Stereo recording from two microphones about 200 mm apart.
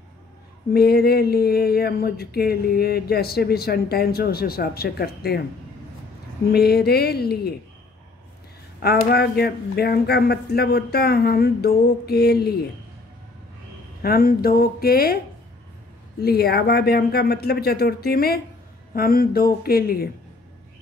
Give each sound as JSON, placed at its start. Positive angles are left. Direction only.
{"t": 0.7, "sound": "speech", "side_deg": 50}
{"t": 6.5, "sound": "speech", "side_deg": 50}
{"t": 8.8, "sound": "speech", "side_deg": 50}
{"t": 14.0, "sound": "speech", "side_deg": 50}
{"t": 16.2, "sound": "speech", "side_deg": 50}